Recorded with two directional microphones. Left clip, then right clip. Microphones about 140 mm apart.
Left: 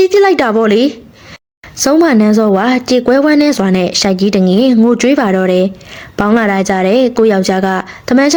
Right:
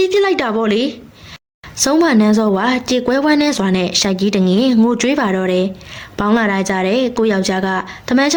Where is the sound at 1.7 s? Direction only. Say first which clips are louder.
Left 4 dB; 35° left (ahead or behind).